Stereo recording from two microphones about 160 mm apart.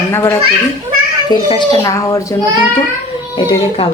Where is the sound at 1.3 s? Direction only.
30° left (ahead or behind).